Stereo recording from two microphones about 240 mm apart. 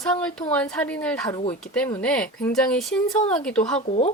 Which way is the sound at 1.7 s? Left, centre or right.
Centre.